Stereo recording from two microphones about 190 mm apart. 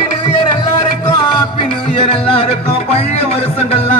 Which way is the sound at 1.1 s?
25° left (ahead or behind).